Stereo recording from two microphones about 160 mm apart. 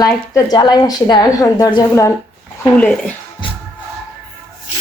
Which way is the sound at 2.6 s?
10° left (ahead or behind).